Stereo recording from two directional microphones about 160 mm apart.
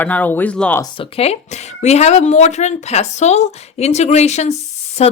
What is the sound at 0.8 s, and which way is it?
Speech, 35° left (ahead or behind).